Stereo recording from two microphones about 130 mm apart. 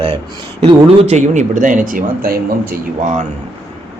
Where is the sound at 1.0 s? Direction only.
65° right (ahead or behind); by 2.0 s 90° right.